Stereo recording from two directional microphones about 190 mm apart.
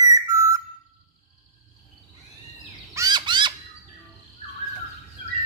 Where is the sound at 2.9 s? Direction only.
20° right (ahead or behind).